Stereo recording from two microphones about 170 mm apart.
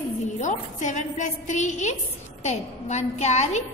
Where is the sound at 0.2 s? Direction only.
45° left (ahead or behind).